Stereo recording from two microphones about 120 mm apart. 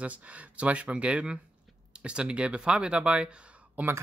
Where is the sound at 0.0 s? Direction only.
10° right (ahead or behind).